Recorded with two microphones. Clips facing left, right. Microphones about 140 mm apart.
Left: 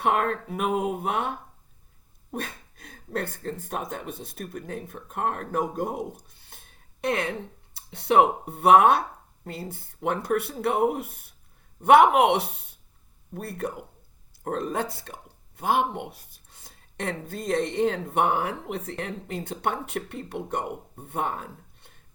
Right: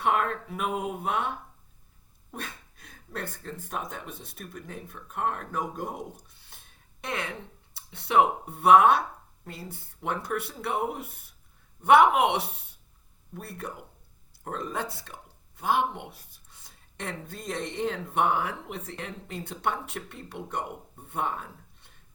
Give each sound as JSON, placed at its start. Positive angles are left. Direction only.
{"t": 0.0, "sound": "speech", "side_deg": 50}
{"t": 6.4, "sound": "music", "side_deg": 50}
{"t": 7.9, "sound": "speech", "side_deg": 55}